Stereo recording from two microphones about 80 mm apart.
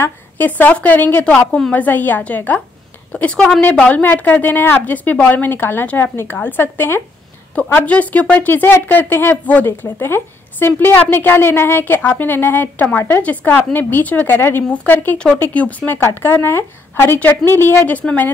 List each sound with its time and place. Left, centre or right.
0.0 s a woman's voice: left